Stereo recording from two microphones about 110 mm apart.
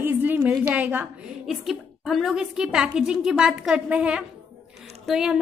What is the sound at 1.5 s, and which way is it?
A woman's voice, 5° right (ahead or behind).